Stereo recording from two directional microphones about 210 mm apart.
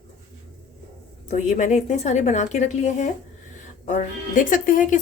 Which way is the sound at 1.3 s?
35° left (ahead or behind).